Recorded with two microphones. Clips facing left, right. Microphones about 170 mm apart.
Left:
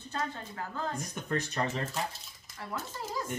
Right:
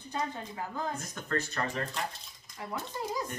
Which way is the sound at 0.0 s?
15° right (ahead or behind).